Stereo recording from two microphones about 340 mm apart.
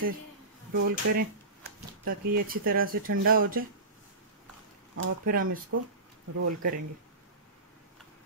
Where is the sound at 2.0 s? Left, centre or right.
Right.